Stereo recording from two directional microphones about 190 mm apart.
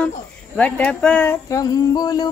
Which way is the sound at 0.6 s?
5° left (ahead or behind).